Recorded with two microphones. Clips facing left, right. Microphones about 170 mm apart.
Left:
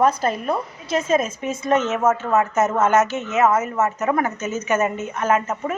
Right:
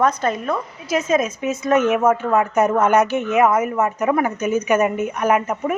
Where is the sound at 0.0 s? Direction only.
30° left (ahead or behind).